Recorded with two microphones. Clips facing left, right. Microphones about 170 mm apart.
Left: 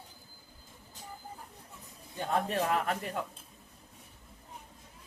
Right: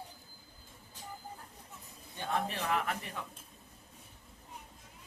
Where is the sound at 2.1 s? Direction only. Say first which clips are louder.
Left 5 dB; 45° left (ahead or behind).